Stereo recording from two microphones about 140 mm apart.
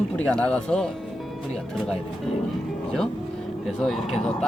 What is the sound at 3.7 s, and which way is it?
Speech, centre (ahead or behind).